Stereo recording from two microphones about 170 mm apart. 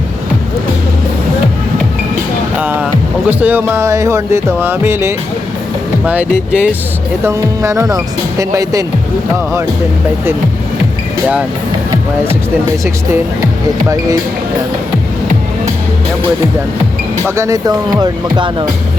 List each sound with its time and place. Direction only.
2.6 s speech: 10° right (ahead or behind)
6.5 s speech: 5° right (ahead or behind)
7.3 s speech: 15° right (ahead or behind)
11.9 s speech: 15° right (ahead or behind)
13.8 s speech: 20° right (ahead or behind)
17.2 s speech: 15° right (ahead or behind)